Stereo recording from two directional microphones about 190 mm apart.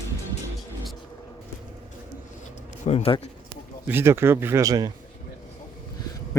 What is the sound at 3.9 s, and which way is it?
Speech, 10° right (ahead or behind).